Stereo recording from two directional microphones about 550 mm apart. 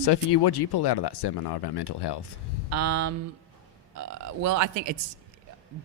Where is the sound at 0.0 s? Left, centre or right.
Left.